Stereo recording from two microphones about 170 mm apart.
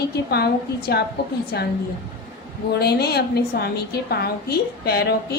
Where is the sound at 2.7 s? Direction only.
70° left (ahead or behind).